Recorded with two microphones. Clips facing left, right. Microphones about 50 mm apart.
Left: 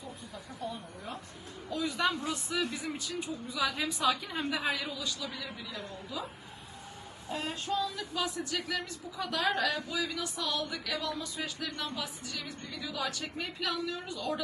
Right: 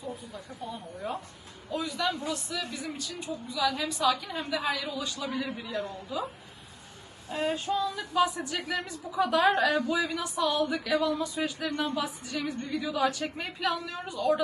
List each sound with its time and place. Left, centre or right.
0.3 s a woman's voice: centre
1.8 s a woman's voice: left
2.2 s a woman's voice: centre
4.0 s a woman's voice: centre
4.9 s a woman's voice: right
7.3 s child singing: right
7.7 s a woman's voice: centre
8.1 s a woman's voice: centre
8.5 s a man's voice: right
9.1 s a woman's voice: centre
9.4 s a woman's voice: right
13.8 s a woman's voice: right